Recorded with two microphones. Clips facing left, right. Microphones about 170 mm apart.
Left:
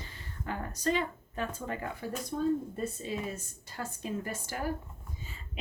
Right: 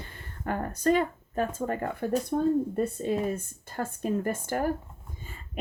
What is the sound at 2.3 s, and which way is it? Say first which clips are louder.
Speech: right 3 dB; 60° right (ahead or behind).